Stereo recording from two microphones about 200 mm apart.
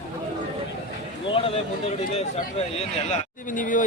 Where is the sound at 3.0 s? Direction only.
40° left (ahead or behind).